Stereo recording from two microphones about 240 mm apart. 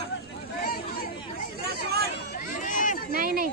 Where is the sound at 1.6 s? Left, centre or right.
Right.